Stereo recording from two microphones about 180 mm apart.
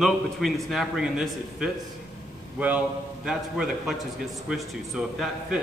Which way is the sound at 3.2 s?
5° right (ahead or behind).